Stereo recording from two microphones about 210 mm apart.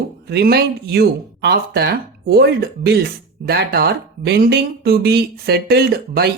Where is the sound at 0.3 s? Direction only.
50° right (ahead or behind).